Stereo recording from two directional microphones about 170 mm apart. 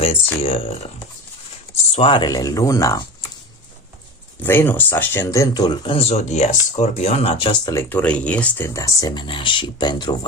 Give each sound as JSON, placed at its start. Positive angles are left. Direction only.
{"t": 0.4, "sound": "speech", "side_deg": 35}
{"t": 1.9, "sound": "speech", "side_deg": 35}
{"t": 4.4, "sound": "speech", "side_deg": 10}
{"t": 7.7, "sound": "speech", "side_deg": 10}